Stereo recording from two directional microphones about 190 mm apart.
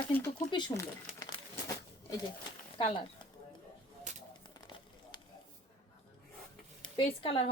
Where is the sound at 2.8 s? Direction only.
35° left (ahead or behind).